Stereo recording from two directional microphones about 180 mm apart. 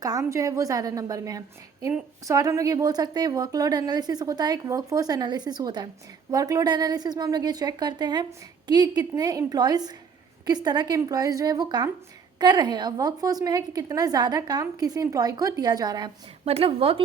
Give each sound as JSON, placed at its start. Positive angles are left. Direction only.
{"t": 0.0, "sound": "a woman's voice", "side_deg": -20}